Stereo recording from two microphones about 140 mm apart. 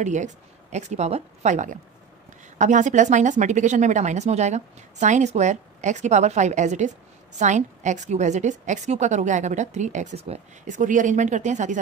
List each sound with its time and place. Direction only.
0.0 s a woman's voice: 60° right (ahead or behind)